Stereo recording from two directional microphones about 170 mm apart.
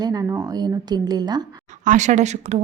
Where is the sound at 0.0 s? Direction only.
20° right (ahead or behind).